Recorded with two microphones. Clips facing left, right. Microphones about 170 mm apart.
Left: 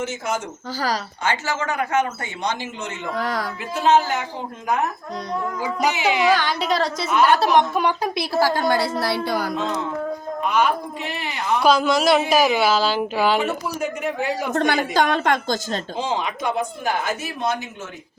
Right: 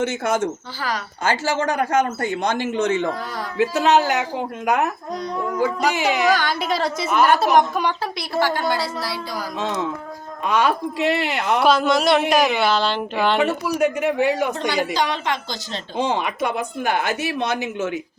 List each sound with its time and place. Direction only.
0.0 s a woman's voice: 65° right (ahead or behind)
1.2 s speech: 40° right (ahead or behind); by 3.0 s 80° right
3.2 s speech: 90° left
3.6 s speech: 75° right (ahead or behind)
6.2 s speech: centre (ahead or behind)
6.8 s a woman's voice: 50° right (ahead or behind)
7.5 s speech: centre (ahead or behind)
8.0 s a woman's voice: 25° left (ahead or behind)
8.4 s a woman's voice: 40° left (ahead or behind); by 9.5 s 60° left (ahead or behind)
10.5 s speech: 90° right; by 11.6 s 75° right (ahead or behind)
11.6 s speech: centre (ahead or behind)
13.7 s speech: 70° right (ahead or behind)
14.5 s a woman's voice: 55° left (ahead or behind)
16.0 s a woman's voice: 60° right (ahead or behind)